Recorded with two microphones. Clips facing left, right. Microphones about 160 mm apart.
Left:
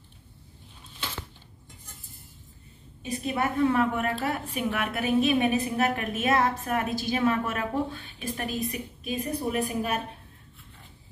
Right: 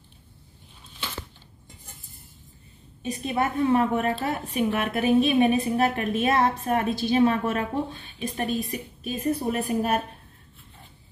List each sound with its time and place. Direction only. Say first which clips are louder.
3.0 s a woman's voice: right 2 dB; 30° right (ahead or behind)
9.0 s a woman's voice: right 4 dB; 35° right (ahead or behind)